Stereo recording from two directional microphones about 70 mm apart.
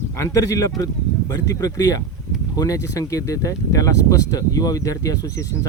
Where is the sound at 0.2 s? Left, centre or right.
Left.